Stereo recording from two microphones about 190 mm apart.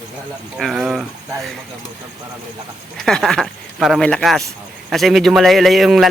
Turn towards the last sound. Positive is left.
turn(degrees=0)  # may be behind; listen again after turning